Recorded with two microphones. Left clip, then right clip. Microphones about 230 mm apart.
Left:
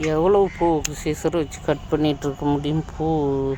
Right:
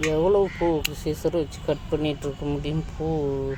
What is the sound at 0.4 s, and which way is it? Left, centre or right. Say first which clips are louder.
Speech: left 4 dB; left.